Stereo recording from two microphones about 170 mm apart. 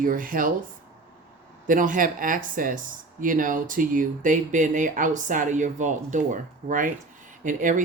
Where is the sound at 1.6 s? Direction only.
50° right (ahead or behind).